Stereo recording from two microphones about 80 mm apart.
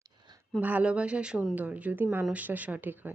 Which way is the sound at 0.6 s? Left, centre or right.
Centre.